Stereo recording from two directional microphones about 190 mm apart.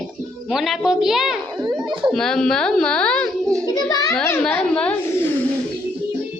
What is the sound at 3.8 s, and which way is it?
Speech, 20° left (ahead or behind).